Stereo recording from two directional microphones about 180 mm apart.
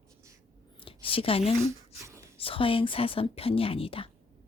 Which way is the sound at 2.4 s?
30° left (ahead or behind).